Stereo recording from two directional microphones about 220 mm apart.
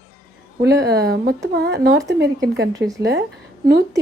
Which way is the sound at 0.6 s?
50° right (ahead or behind).